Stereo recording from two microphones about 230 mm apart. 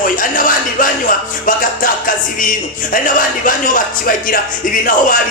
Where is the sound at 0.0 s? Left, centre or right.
Left.